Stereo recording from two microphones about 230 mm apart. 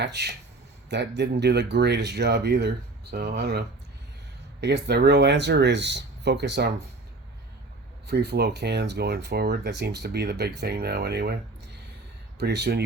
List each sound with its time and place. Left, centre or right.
0.0 s speech: right
4.6 s speech: right
8.0 s speech: right
12.4 s speech: right